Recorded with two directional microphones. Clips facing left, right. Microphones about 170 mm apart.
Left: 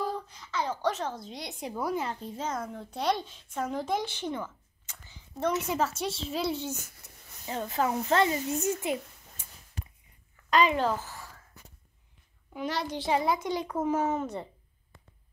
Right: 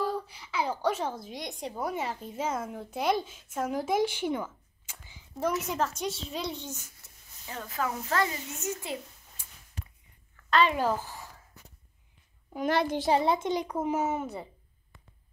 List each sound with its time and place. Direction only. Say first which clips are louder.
0.0 s a sound: right 2 dB; 10° right (ahead or behind)
1.9 s a woman's voice: left 3 dB; centre (ahead or behind)
5.7 s a woman's voice: left 1 dB; 5° left (ahead or behind)
7.0 s a sound: left 5 dB; 15° left (ahead or behind)
7.4 s speech: left 4 dB; 25° left (ahead or behind)
10.8 s a woman's voice: even; 15° right (ahead or behind)
12.5 s a child's voice: right 5 dB; 55° right (ahead or behind)
13.1 s a child's voice: right 1 dB; 30° right (ahead or behind); by 14.5 s 5° right (ahead or behind)